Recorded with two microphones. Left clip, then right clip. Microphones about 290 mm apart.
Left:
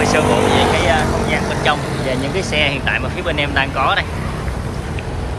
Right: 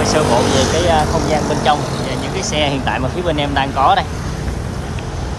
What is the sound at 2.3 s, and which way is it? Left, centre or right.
Speech, centre.